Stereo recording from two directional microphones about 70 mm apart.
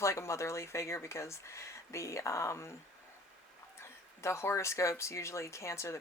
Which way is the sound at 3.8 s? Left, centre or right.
Left.